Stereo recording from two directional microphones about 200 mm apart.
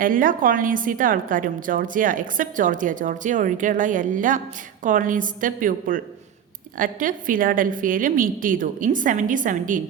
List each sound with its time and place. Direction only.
0.0 s a woman's voice: 45° right (ahead or behind)